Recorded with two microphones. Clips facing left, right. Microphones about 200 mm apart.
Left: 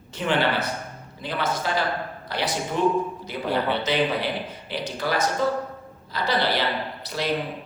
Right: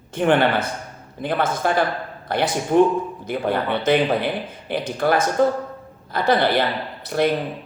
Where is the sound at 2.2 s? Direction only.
55° right (ahead or behind).